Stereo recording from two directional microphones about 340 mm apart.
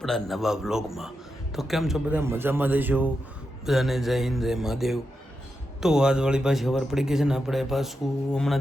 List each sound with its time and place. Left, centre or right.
0.0 s speech: centre